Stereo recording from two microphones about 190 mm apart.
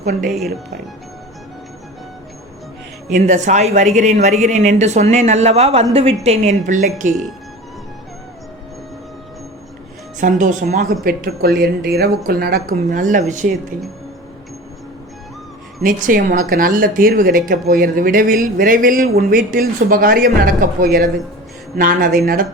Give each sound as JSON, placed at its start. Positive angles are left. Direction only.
{"t": 0.3, "sound": "speech", "side_deg": 0}
{"t": 3.1, "sound": "a woman's voice", "side_deg": -40}
{"t": 10.2, "sound": "speech", "side_deg": -45}
{"t": 15.8, "sound": "speech", "side_deg": -45}